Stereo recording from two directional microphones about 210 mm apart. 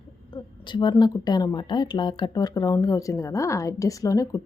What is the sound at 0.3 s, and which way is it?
A woman's voice, 20° left (ahead or behind).